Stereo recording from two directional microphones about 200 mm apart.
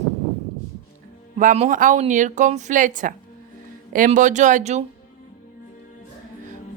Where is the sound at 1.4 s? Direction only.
40° right (ahead or behind).